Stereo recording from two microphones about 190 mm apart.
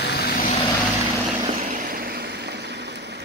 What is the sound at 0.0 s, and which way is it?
Vehicle, 55° left (ahead or behind).